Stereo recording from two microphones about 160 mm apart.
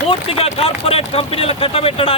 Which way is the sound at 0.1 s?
35° left (ahead or behind).